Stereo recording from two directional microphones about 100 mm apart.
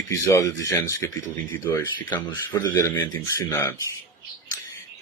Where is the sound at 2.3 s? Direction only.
40° left (ahead or behind).